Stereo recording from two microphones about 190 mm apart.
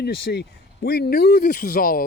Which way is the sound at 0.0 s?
55° left (ahead or behind).